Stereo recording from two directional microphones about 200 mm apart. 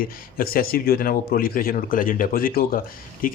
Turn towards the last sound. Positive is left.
turn(degrees=45)  # may be behind; listen again after turning